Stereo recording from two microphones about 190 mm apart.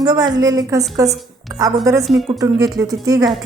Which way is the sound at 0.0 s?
20° right (ahead or behind).